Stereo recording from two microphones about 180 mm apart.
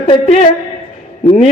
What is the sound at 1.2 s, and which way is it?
Speech, 30° left (ahead or behind).